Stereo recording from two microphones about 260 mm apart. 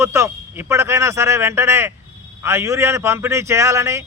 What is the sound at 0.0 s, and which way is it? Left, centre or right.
A man's voice, centre.